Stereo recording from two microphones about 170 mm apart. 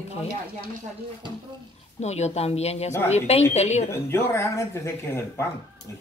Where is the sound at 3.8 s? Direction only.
15° left (ahead or behind).